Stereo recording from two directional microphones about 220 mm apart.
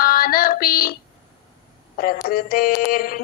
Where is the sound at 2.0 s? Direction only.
40° left (ahead or behind).